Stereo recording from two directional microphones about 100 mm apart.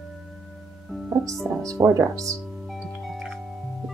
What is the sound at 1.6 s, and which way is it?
Speech, 35° right (ahead or behind).